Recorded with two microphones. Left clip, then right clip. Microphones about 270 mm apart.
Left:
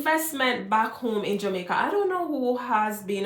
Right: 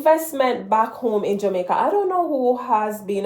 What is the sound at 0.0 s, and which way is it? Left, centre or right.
Speech, left.